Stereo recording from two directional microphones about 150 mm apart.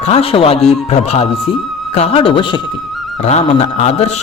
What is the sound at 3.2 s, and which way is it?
Speech, 45° left (ahead or behind).